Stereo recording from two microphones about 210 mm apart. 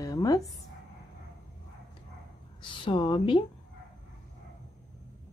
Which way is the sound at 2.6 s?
20° left (ahead or behind).